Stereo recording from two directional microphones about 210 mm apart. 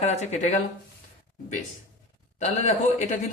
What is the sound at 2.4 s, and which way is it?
Speech, 35° left (ahead or behind).